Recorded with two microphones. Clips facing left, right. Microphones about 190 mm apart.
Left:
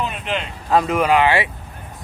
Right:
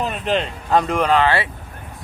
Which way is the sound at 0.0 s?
35° right (ahead or behind).